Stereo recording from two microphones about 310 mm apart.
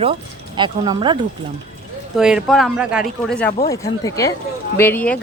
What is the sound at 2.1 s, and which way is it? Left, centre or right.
Speech, centre.